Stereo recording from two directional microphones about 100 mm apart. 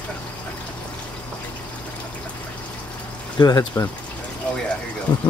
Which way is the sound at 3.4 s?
45° left (ahead or behind).